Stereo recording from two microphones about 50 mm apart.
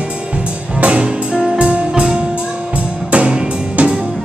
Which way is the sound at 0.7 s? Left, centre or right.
Right.